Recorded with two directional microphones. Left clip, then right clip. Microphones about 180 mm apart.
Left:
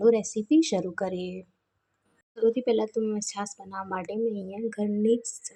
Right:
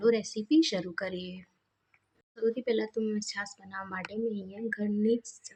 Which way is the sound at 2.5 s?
15° left (ahead or behind).